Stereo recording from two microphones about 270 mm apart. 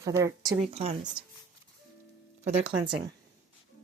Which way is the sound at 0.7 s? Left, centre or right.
Right.